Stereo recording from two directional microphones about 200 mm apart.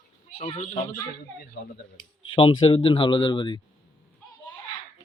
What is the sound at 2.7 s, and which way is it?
Speech, 25° left (ahead or behind).